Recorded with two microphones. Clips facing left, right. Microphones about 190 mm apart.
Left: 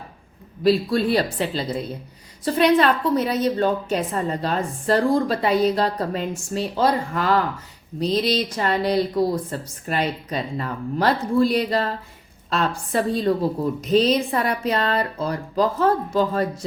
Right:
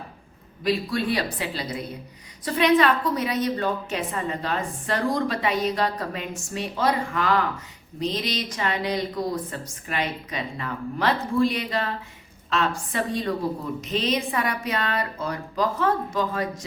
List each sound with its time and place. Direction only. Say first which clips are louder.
0.6 s a woman's voice: left 6 dB; 30° left (ahead or behind)